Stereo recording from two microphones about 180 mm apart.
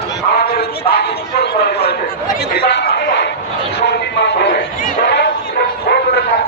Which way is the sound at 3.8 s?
70° left (ahead or behind).